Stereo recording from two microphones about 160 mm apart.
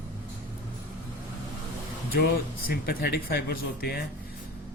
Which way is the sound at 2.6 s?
75° left (ahead or behind).